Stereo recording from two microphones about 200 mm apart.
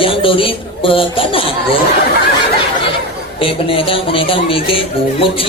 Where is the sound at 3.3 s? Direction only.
25° left (ahead or behind).